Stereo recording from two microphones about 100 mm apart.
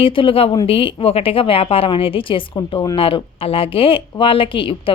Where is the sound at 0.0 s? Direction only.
65° left (ahead or behind).